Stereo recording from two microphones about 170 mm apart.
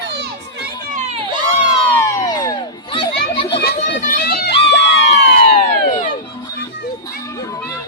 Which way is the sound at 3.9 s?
60° left (ahead or behind).